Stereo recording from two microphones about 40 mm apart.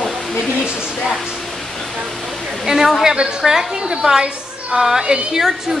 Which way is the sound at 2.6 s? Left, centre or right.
Centre.